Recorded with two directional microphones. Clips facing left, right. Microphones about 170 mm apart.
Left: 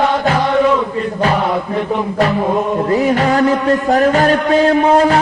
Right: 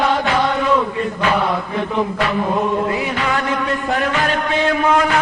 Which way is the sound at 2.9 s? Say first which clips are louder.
Left 7 dB; 40° left (ahead or behind).